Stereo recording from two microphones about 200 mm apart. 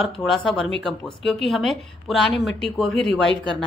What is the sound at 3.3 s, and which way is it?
Speech, 25° right (ahead or behind).